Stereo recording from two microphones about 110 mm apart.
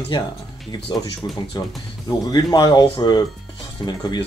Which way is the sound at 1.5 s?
40° left (ahead or behind).